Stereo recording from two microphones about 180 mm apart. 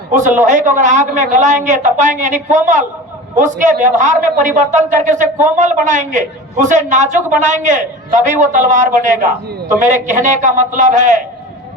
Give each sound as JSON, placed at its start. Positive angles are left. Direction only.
{"t": 0.1, "sound": "a man's voice", "side_deg": -45}